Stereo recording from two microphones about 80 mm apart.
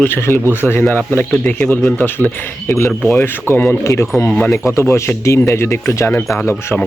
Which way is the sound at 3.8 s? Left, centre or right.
Left.